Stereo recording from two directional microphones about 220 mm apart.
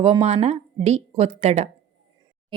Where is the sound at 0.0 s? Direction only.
25° right (ahead or behind).